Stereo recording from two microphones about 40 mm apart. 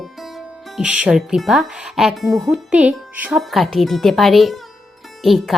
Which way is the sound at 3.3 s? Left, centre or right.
Centre.